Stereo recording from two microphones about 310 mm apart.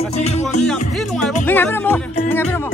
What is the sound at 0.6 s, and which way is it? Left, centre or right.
Music, centre.